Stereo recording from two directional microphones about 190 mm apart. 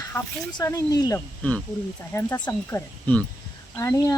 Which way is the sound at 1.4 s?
5° left (ahead or behind).